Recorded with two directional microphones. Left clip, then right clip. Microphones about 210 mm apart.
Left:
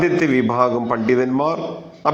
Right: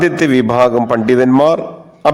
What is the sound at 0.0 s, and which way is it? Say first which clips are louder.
A man's voice: right 5 dB; 40° right (ahead or behind).